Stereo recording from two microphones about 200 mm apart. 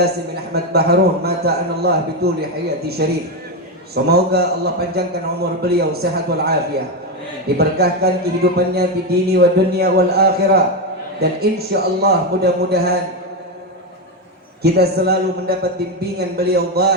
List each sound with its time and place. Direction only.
0.5 s speech: 55° right (ahead or behind)
3.9 s speech: 55° right (ahead or behind)
7.6 s speech: 55° right (ahead or behind)
14.6 s speech: 55° right (ahead or behind)